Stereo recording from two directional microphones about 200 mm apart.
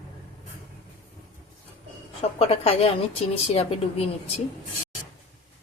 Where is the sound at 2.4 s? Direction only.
30° left (ahead or behind).